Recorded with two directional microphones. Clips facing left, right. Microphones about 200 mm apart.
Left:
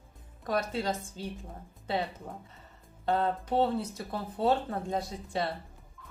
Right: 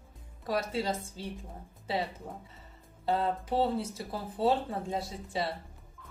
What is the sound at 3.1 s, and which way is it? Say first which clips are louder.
Speech: left 1 dB; 5° right (ahead or behind).